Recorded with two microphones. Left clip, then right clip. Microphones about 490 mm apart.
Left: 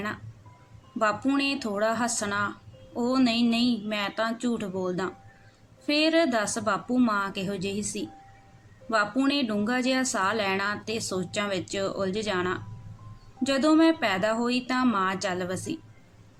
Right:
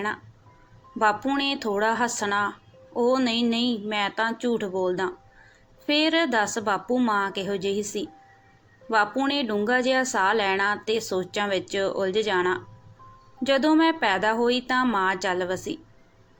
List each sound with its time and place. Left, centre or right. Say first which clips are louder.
1.0 s a woman's voice: right 3 dB; left